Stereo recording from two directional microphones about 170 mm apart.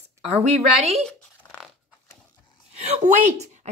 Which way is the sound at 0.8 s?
40° right (ahead or behind).